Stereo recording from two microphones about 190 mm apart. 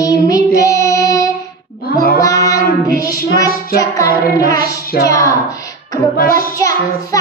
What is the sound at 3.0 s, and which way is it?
Child singing, 15° left (ahead or behind).